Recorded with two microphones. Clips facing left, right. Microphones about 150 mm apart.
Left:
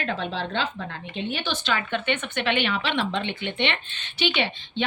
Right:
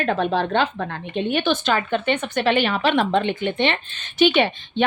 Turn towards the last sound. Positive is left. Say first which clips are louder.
# right 7 dB
turn(degrees=-45)  # may be behind; listen again after turning